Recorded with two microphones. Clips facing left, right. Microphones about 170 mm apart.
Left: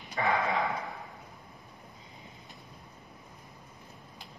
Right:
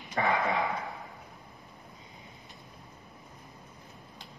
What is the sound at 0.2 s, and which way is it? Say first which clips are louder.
Speech: right 1 dB; 55° right (ahead or behind).